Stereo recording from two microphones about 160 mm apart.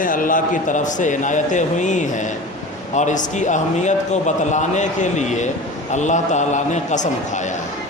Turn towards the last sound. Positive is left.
turn(degrees=50)  # may be behind; listen again after turning